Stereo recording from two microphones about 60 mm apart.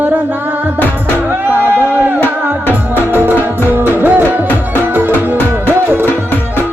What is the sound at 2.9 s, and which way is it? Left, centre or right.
Tabla, right.